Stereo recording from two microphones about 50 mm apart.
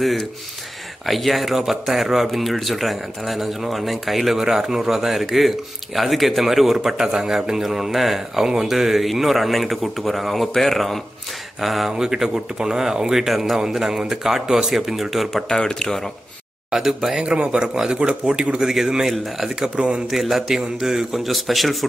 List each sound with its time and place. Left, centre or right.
0.0 s speech: centre
15.4 s speech: centre
16.7 s speech: centre
17.2 s speech: centre
19.0 s speech: centre